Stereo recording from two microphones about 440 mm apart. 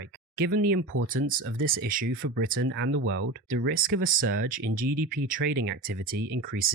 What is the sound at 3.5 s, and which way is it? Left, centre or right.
Speech, centre.